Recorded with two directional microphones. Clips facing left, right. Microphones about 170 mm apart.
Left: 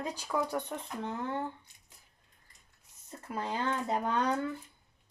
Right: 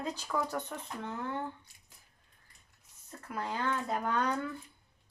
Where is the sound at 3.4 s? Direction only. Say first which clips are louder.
Left 1 dB; 25° left (ahead or behind).